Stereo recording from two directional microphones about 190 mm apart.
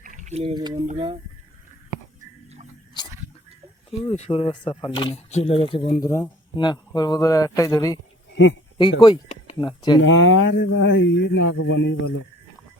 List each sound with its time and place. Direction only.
0.0 s a sound: 40° right (ahead or behind); by 0.8 s 20° right (ahead or behind)
0.9 s speech: 25° right (ahead or behind)
4.1 s speech: 35° left (ahead or behind)
6.0 s speech: 15° left (ahead or behind)
10.0 s speech: 90° left; by 11.9 s 75° left (ahead or behind)